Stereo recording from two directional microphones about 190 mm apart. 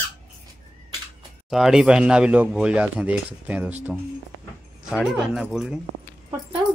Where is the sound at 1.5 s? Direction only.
Centre (ahead or behind).